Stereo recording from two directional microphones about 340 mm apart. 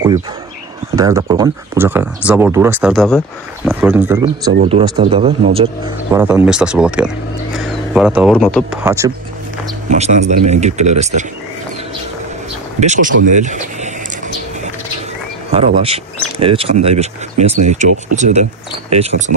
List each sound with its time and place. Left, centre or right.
0.9 s speech: centre
6.1 s speech: centre
9.8 s speech: centre
12.8 s speech: right
13.3 s a sound: right
15.5 s speech: centre